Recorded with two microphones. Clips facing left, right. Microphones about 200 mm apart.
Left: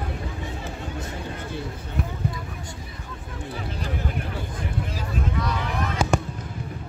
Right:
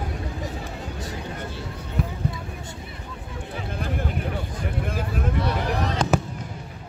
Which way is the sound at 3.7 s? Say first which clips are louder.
Right 5 dB; 55° right (ahead or behind).